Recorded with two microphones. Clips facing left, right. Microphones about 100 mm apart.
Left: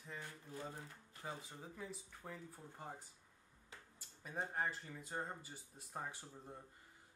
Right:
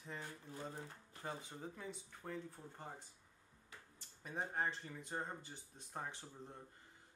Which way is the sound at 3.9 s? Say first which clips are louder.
Even; centre (ahead or behind).